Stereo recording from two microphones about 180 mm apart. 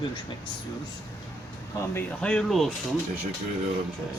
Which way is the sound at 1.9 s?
5° left (ahead or behind).